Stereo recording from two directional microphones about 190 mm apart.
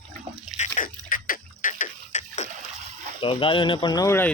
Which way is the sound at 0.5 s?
40° left (ahead or behind).